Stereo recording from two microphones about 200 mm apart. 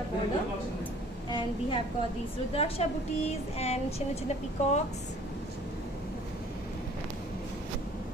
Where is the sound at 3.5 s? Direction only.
30° left (ahead or behind).